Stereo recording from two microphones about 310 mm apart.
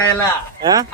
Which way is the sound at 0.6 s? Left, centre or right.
Centre.